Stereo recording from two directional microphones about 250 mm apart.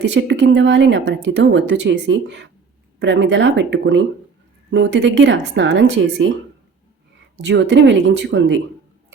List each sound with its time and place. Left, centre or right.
0.0 s speech: right
7.4 s speech: right